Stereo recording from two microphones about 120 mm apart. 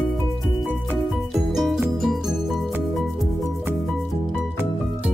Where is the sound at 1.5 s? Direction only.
Centre (ahead or behind).